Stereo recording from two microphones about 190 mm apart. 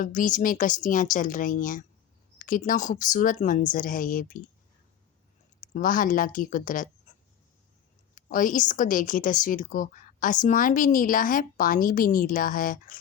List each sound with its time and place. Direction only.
0.0 s speech: 45° left (ahead or behind)
5.5 s speech: 45° left (ahead or behind)
8.1 s speech: 45° left (ahead or behind)